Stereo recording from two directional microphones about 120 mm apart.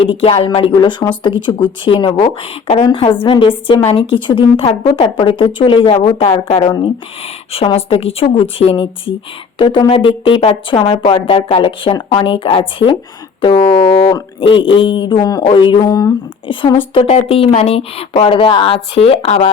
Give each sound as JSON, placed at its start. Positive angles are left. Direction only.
{"t": 0.0, "sound": "speech", "side_deg": 50}
{"t": 2.2, "sound": "speech", "side_deg": 55}
{"t": 14.0, "sound": "speech", "side_deg": 40}
{"t": 15.4, "sound": "speech", "side_deg": 45}
{"t": 16.5, "sound": "speech", "side_deg": 45}